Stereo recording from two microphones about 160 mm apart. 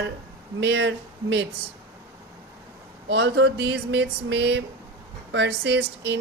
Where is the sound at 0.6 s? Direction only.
90° right.